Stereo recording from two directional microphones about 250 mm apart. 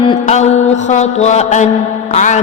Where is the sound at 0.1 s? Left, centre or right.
Left.